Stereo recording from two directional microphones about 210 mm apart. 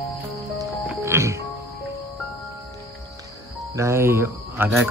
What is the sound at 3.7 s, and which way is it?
Speech, 15° right (ahead or behind).